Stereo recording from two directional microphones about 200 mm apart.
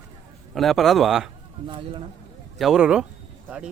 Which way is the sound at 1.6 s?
25° right (ahead or behind).